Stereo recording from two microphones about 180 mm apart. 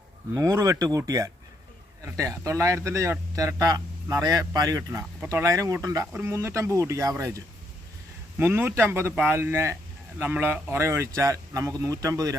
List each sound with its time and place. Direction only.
0.3 s a man's voice: 20° right (ahead or behind)